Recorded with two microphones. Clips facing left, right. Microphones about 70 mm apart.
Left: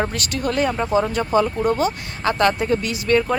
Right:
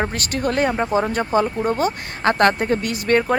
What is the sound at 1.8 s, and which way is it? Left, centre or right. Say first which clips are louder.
Speech: even; right.